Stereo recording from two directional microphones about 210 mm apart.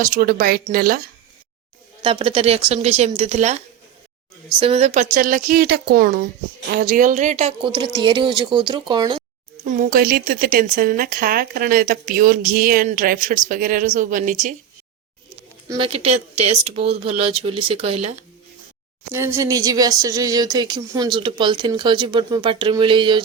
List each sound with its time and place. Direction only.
0.0 s speech: 40° right (ahead or behind)
2.0 s speech: 25° right (ahead or behind)
4.6 s speech: 30° right (ahead or behind)
9.6 s speech: 40° right (ahead or behind)
15.7 s speech: 25° right (ahead or behind)
19.1 s speech: 10° right (ahead or behind)